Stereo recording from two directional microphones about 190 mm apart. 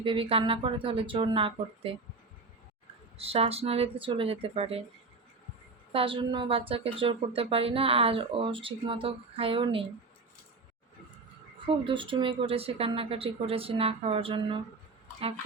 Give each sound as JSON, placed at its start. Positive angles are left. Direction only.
{"t": 0.0, "sound": "speech", "side_deg": -30}
{"t": 3.2, "sound": "speech", "side_deg": -30}
{"t": 5.9, "sound": "speech", "side_deg": -30}
{"t": 11.6, "sound": "speech", "side_deg": -25}